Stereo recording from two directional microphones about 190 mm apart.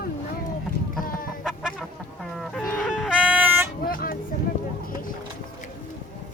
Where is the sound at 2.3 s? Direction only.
Centre (ahead or behind).